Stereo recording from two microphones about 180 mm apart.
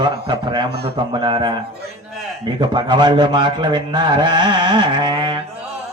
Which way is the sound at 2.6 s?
25° right (ahead or behind).